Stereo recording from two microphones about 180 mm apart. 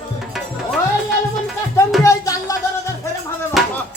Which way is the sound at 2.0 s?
20° left (ahead or behind).